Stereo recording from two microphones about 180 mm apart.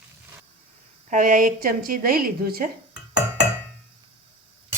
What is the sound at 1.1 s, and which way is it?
A woman's voice, 50° right (ahead or behind).